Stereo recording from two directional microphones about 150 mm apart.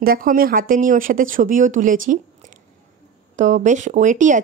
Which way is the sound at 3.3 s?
55° right (ahead or behind).